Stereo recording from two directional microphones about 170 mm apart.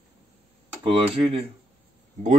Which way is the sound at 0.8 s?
35° right (ahead or behind).